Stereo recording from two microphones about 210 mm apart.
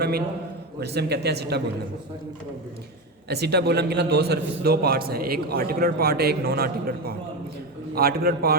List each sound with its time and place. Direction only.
0.8 s a man's voice: 50° right (ahead or behind)
3.2 s a man's voice: 50° right (ahead or behind)